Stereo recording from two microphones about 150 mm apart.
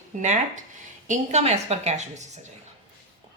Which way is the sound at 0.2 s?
55° right (ahead or behind).